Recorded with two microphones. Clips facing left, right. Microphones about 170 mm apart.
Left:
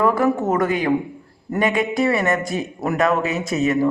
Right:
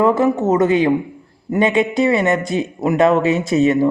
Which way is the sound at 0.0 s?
25° right (ahead or behind).